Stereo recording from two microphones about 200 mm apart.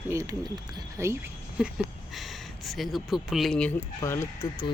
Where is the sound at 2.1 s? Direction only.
Centre (ahead or behind).